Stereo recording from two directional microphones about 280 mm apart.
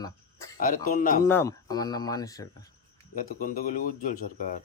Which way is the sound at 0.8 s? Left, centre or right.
Left.